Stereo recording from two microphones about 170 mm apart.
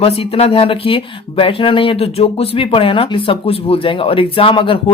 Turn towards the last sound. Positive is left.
turn(degrees=30)  # may be behind; listen again after turning